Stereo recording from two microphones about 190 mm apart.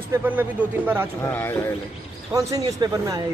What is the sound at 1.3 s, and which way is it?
Speech, 10° left (ahead or behind).